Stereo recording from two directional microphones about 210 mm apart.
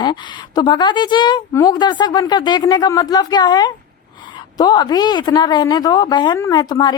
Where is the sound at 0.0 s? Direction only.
20° left (ahead or behind).